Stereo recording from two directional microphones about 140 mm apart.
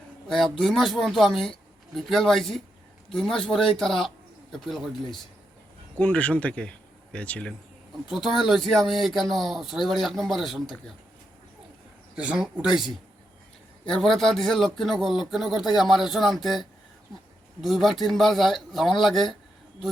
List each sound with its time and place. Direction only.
0.3 s speech: centre (ahead or behind)
12.1 s speech: 10° right (ahead or behind)